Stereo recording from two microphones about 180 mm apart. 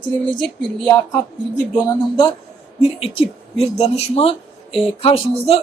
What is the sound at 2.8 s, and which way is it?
Speech, 30° left (ahead or behind).